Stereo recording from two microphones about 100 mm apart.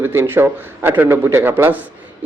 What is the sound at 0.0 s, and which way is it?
A man's voice, 20° right (ahead or behind).